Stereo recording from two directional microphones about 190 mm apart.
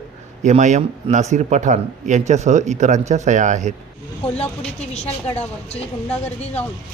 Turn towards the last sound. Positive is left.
turn(degrees=35)  # may be behind; listen again after turning